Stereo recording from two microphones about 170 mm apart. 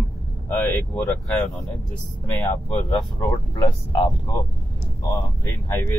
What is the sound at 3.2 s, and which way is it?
Speech, 25° left (ahead or behind).